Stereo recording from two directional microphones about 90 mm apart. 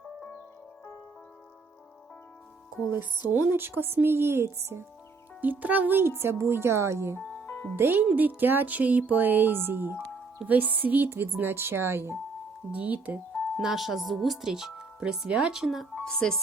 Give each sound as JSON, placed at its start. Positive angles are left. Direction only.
{"t": 2.9, "sound": "speech", "side_deg": -20}
{"t": 5.4, "sound": "speech", "side_deg": -20}
{"t": 7.4, "sound": "music", "side_deg": 20}
{"t": 7.8, "sound": "speech", "side_deg": -25}
{"t": 13.6, "sound": "speech", "side_deg": -5}
{"t": 16.0, "sound": "speech", "side_deg": 10}